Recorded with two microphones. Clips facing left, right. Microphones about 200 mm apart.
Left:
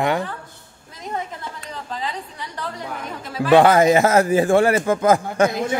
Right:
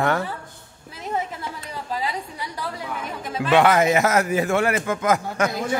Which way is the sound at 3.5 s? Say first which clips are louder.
Left 4 dB; 30° left (ahead or behind).